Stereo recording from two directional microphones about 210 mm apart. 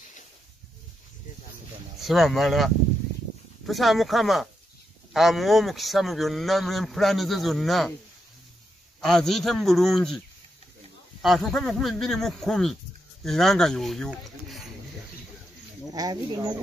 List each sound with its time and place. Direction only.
2.0 s speech: centre (ahead or behind)
9.0 s speech: centre (ahead or behind)
11.2 s speech: centre (ahead or behind)
15.9 s speech: 20° right (ahead or behind)